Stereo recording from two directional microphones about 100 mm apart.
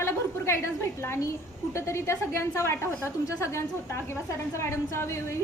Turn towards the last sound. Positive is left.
turn(degrees=30)  # may be behind; listen again after turning